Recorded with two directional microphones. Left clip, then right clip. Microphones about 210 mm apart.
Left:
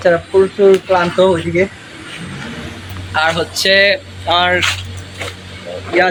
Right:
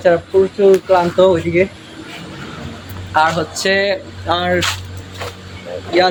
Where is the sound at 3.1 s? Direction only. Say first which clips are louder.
Even; 50° right (ahead or behind).